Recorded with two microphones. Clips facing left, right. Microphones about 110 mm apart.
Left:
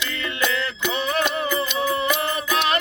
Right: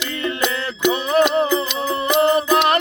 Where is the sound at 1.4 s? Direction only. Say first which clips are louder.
Right 3 dB; 20° right (ahead or behind).